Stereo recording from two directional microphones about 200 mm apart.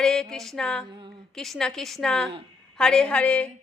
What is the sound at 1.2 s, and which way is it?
A woman's voice, centre (ahead or behind).